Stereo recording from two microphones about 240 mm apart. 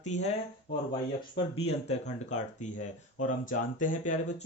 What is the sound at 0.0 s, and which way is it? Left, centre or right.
Speech, left.